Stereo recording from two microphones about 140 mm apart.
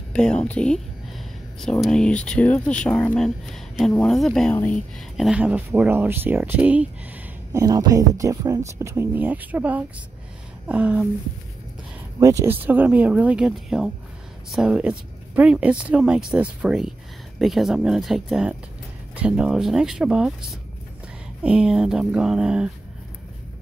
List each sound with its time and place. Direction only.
0.1 s speech: 5° left (ahead or behind); by 6.9 s 10° right (ahead or behind)
7.5 s speech: 25° right (ahead or behind); by 11.1 s 10° right (ahead or behind)
12.2 s speech: 20° right (ahead or behind); by 20.3 s 5° right (ahead or behind)
21.4 s speech: 5° right (ahead or behind)